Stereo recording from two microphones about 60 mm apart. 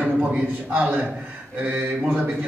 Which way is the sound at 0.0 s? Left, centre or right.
Right.